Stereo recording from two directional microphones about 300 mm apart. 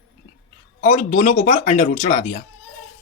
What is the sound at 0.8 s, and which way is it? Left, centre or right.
A man's voice, left.